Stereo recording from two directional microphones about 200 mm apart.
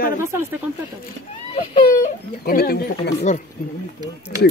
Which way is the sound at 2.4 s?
50° left (ahead or behind).